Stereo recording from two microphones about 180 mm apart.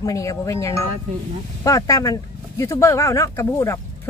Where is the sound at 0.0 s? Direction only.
20° left (ahead or behind).